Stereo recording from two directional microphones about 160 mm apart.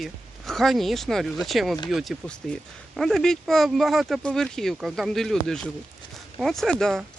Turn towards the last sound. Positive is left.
turn(degrees=5)  # may be behind; listen again after turning